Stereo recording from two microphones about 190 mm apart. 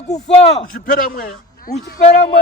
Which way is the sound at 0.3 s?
30° left (ahead or behind).